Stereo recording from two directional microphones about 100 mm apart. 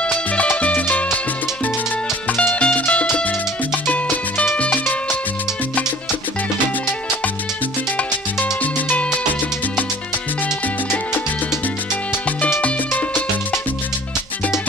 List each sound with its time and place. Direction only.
0.0 s music: 15° left (ahead or behind)
2.2 s music: 15° left (ahead or behind)
8.4 s music: 20° left (ahead or behind)
12.6 s music: 20° left (ahead or behind)